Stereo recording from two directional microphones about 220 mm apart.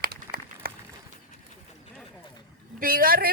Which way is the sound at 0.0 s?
45° right (ahead or behind).